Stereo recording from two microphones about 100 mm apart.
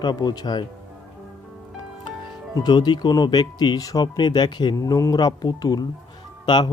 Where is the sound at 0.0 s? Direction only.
45° left (ahead or behind).